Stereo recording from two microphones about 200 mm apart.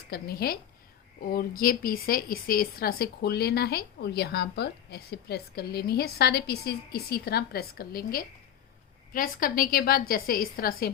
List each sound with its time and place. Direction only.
0.1 s a woman's voice: 50° left (ahead or behind)